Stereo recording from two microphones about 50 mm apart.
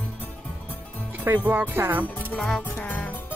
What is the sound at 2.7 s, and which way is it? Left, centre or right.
Music, left.